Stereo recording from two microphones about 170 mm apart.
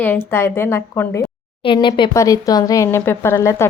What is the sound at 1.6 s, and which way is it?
A woman's voice, 30° left (ahead or behind).